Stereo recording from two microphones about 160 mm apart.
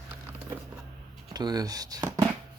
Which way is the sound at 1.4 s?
25° right (ahead or behind).